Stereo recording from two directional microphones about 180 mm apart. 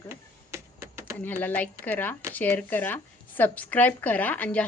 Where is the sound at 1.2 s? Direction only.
10° left (ahead or behind).